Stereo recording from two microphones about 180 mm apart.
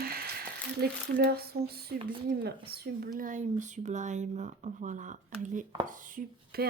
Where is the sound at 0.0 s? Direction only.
60° right (ahead or behind).